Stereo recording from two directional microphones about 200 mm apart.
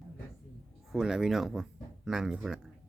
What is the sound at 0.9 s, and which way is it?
Speech, 5° right (ahead or behind).